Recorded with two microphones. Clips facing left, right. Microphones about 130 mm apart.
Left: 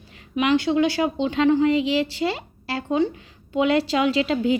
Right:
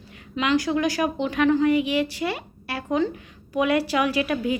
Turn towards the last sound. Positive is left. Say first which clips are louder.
# left 3 dB
turn(degrees=25)  # may be behind; listen again after turning